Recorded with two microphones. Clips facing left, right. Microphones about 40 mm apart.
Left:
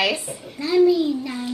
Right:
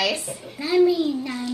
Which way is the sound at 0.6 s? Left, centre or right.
Centre.